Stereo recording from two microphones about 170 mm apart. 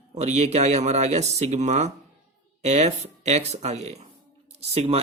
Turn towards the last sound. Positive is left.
turn(degrees=-40)  # may be behind; listen again after turning